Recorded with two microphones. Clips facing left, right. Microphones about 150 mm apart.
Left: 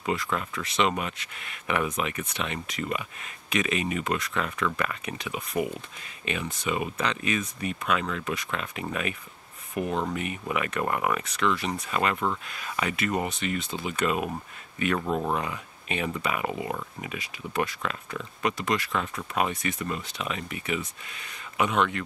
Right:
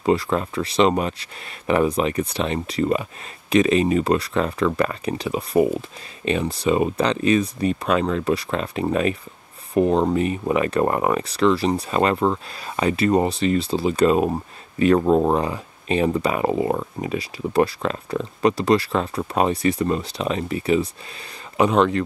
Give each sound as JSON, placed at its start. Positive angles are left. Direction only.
{"t": 0.0, "sound": "speech", "side_deg": -35}